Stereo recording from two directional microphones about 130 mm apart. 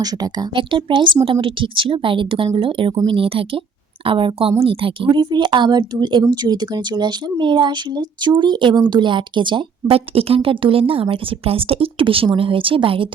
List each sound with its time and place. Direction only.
0.0 s speech: 30° right (ahead or behind)